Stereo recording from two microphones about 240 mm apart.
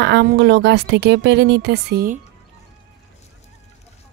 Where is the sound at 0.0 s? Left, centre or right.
Right.